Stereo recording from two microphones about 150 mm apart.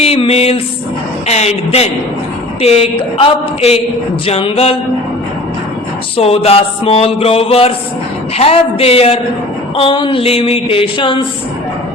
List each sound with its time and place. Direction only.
0.0 s music: 40° left (ahead or behind)
1.3 s a man's voice: 45° left (ahead or behind)
6.1 s speech: 40° left (ahead or behind)